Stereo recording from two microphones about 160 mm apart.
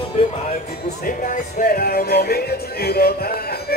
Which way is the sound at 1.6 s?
70° left (ahead or behind).